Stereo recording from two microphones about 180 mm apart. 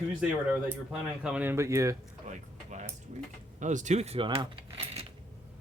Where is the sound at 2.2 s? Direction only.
40° right (ahead or behind).